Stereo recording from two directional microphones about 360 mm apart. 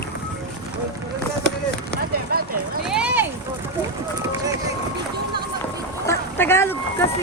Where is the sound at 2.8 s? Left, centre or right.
Centre.